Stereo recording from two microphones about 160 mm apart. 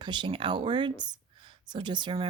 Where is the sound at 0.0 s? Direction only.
30° right (ahead or behind).